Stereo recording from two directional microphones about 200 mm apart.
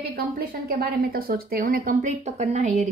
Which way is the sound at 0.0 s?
50° right (ahead or behind).